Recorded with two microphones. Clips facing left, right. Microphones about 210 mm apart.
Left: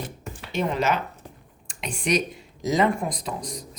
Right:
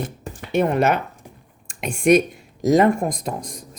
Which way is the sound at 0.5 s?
55° right (ahead or behind).